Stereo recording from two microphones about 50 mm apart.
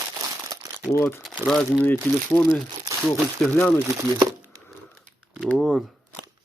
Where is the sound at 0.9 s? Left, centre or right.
Left.